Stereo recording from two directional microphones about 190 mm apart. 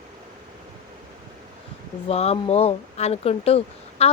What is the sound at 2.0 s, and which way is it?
A woman's voice, 30° left (ahead or behind).